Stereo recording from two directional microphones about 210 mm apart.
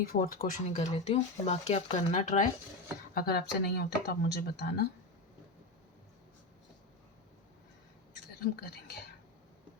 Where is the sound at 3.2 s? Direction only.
45° left (ahead or behind).